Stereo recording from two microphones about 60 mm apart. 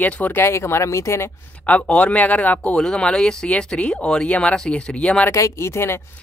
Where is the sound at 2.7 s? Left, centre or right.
Centre.